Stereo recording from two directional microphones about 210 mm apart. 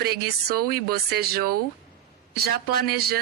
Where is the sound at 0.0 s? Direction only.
50° right (ahead or behind).